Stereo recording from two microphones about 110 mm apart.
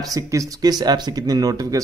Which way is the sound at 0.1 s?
30° right (ahead or behind).